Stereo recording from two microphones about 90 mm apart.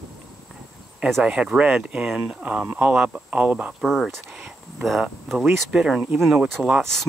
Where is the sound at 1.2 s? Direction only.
10° right (ahead or behind).